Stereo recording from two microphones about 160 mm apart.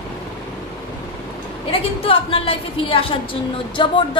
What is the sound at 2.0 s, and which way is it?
A woman's voice, 35° left (ahead or behind).